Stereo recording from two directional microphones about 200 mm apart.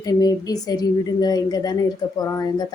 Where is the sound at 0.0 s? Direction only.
20° left (ahead or behind).